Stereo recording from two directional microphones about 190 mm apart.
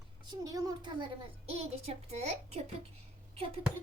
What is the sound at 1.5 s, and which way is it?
A woman's voice, 30° right (ahead or behind).